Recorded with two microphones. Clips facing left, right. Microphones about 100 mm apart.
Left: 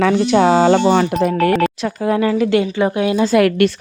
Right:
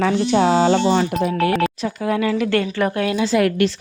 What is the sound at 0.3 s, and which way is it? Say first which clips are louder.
Speech: left 3 dB; 55° left (ahead or behind).